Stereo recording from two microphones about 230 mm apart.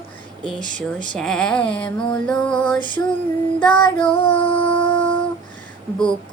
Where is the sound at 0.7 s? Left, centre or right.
Right.